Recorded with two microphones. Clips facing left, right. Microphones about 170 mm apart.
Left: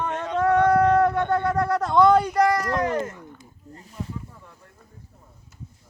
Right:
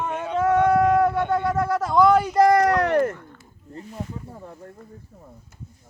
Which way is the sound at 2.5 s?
65° right (ahead or behind).